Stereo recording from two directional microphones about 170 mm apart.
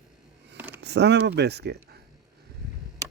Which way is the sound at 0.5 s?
10° right (ahead or behind).